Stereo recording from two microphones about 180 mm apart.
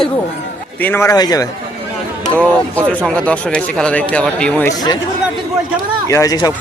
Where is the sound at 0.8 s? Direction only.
10° left (ahead or behind).